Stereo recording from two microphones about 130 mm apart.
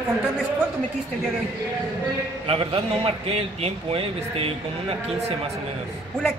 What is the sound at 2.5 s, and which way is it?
A man's voice, 45° right (ahead or behind).